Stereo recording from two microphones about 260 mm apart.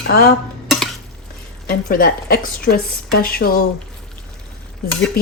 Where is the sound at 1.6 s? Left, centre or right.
Left.